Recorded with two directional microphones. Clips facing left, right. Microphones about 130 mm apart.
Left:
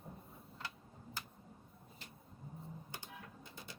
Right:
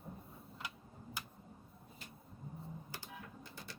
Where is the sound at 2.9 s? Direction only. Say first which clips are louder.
Right 1 dB; 20° left (ahead or behind).